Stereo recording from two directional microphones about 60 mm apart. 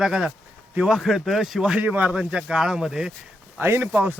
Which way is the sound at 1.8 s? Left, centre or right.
Right.